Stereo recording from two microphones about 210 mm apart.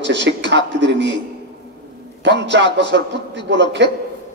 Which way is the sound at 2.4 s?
55° right (ahead or behind).